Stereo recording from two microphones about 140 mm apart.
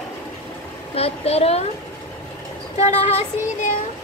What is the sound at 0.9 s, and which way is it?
Child singing, 45° left (ahead or behind).